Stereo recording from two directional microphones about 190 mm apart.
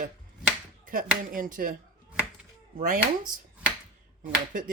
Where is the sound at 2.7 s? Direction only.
45° right (ahead or behind).